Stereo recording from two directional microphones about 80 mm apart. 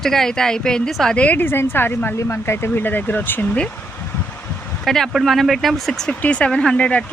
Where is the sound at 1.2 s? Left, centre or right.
Left.